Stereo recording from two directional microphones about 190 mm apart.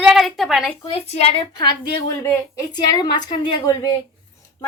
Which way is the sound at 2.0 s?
15° left (ahead or behind).